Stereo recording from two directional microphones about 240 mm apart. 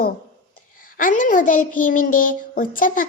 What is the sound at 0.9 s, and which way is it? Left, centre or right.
A child's voice, left.